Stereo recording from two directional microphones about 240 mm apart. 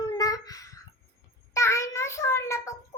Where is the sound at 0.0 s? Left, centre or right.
Centre.